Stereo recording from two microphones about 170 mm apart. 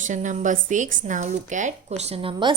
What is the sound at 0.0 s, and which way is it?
A woman's voice, 45° right (ahead or behind).